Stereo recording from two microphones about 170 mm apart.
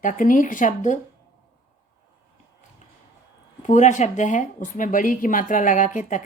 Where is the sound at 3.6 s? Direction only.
45° left (ahead or behind).